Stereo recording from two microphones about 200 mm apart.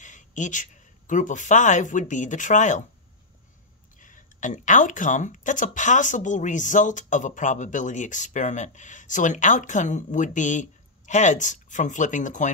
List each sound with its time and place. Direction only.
0.0 s speech: 40° left (ahead or behind)
4.0 s speech: 40° left (ahead or behind)